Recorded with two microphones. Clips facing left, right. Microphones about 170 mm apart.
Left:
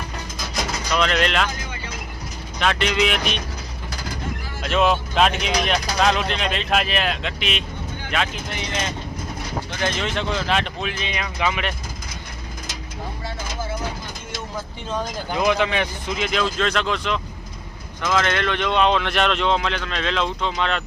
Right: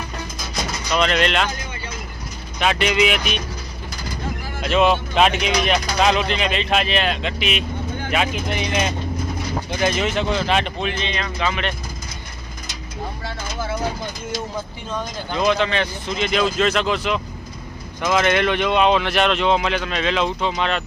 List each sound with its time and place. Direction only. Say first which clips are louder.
0.9 s speech: right 2 dB; centre (ahead or behind)
2.6 s speech: right 2 dB; 5° right (ahead or behind)
4.6 s speech: right 2 dB; centre (ahead or behind)
15.3 s speech: right 1 dB; 10° left (ahead or behind); by 17.2 s 5° right (ahead or behind)
18.0 s speech: right 3 dB; 15° right (ahead or behind)